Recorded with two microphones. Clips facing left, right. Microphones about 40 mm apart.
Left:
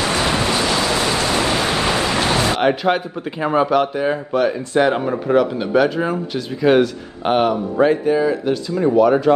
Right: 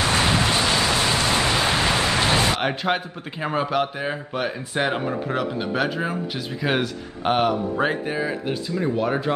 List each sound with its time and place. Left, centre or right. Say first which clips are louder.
0.0 s waves: left 2 dB; left
1.0 s a sound: left 3 dB; left
2.6 s speech: left 7 dB; centre
7.8 s speech: left 12 dB; centre